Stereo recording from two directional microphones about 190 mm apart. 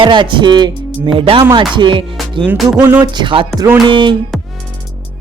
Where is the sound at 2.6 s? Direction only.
10° right (ahead or behind).